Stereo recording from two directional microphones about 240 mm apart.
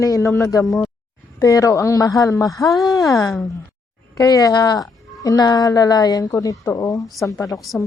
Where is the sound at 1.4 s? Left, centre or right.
Centre.